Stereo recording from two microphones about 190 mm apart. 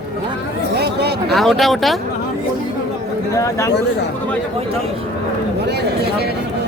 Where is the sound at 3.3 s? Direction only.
15° left (ahead or behind).